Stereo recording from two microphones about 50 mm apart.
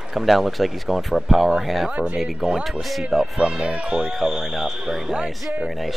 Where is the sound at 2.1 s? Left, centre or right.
Centre.